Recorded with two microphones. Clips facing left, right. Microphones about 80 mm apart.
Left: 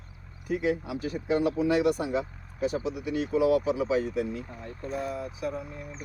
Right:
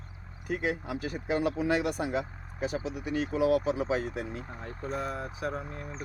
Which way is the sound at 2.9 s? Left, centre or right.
Right.